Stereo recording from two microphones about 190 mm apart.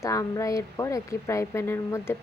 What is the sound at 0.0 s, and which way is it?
Speech, 15° left (ahead or behind).